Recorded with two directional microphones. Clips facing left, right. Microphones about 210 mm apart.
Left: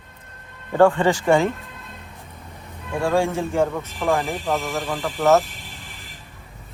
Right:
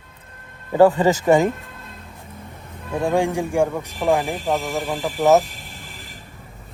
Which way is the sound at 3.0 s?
15° right (ahead or behind).